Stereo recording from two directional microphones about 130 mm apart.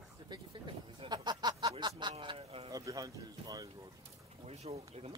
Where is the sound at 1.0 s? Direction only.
35° right (ahead or behind).